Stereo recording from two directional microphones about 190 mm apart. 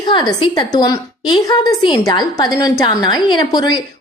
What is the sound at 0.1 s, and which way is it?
A woman's voice, 25° left (ahead or behind).